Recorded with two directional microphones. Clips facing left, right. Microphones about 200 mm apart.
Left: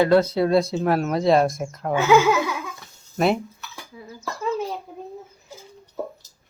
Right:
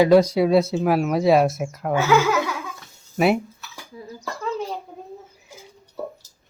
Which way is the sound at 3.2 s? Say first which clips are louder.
Right 2 dB; 5° right (ahead or behind).